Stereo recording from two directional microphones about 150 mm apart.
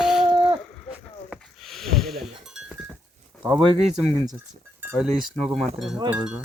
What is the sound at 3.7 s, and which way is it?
Speech, 45° right (ahead or behind).